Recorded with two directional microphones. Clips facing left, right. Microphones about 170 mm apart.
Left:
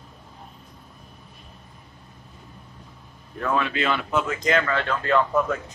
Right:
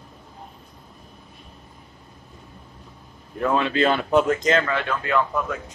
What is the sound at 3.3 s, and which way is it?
Speech, 20° right (ahead or behind).